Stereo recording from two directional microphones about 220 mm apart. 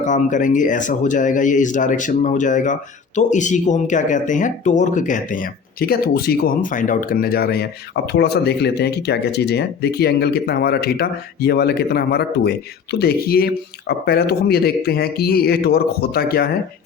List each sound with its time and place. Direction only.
0.0 s speech: 35° left (ahead or behind)